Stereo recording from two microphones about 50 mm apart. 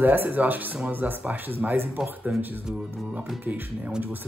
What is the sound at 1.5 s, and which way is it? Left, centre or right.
Speech, right.